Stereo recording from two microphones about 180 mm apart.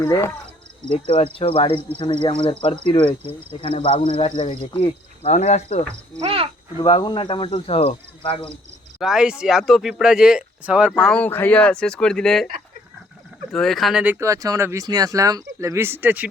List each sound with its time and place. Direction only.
0.0 s speech: 15° left (ahead or behind)
1.0 s speech: 30° left (ahead or behind)
6.1 s speech: 35° right (ahead or behind)
6.8 s speech: 25° left (ahead or behind)
9.0 s speech: 5° right (ahead or behind)
11.0 s speech: 5° left (ahead or behind)
13.5 s speech: centre (ahead or behind)